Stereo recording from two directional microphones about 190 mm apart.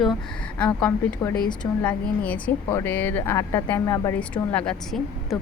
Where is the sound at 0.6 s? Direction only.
15° left (ahead or behind).